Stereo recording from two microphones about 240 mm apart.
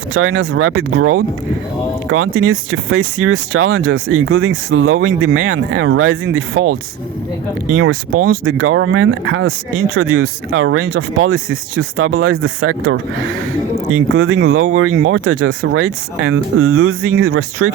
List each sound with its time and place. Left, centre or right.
0.1 s speech: right